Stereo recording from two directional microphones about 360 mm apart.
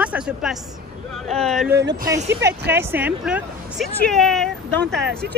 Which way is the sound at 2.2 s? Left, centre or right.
Right.